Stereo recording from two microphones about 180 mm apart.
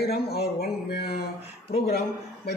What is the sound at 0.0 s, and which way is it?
A man's voice, 60° left (ahead or behind).